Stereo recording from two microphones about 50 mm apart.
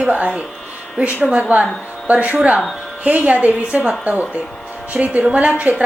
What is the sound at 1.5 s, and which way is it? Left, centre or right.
A woman's voice, right.